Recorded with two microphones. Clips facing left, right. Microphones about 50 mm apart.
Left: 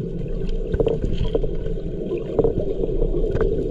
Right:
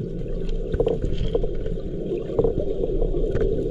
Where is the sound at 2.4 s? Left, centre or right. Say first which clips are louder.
Left 2 dB; left.